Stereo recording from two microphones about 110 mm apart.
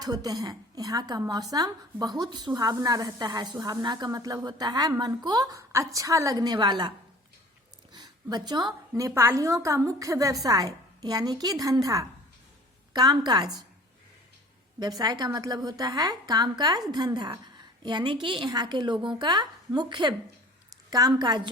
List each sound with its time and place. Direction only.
0.0 s speech: 35° right (ahead or behind)
7.9 s a sound: 40° right (ahead or behind)
9.0 s a woman's voice: 25° right (ahead or behind)
14.8 s a woman's voice: 35° right (ahead or behind)